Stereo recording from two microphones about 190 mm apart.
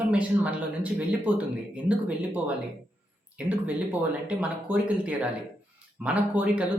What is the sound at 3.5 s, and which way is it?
Speech, 10° right (ahead or behind).